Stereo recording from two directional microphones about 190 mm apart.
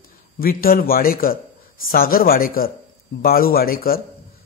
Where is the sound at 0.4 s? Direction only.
50° left (ahead or behind).